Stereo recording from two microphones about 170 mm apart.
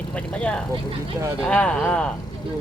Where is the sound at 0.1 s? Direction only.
5° left (ahead or behind).